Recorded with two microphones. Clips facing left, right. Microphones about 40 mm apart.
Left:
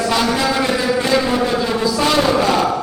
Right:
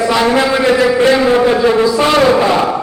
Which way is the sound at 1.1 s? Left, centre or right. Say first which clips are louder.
Right 6 dB; right.